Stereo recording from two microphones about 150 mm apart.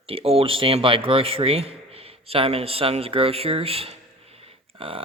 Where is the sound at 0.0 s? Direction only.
40° right (ahead or behind).